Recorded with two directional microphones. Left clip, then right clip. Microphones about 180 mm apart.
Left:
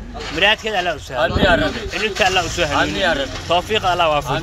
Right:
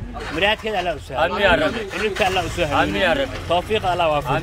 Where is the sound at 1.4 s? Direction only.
25° right (ahead or behind).